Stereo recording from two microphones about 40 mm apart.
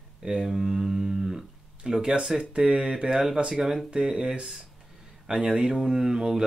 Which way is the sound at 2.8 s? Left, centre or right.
Centre.